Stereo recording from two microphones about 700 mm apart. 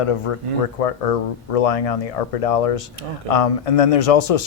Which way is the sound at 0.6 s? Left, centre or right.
Left.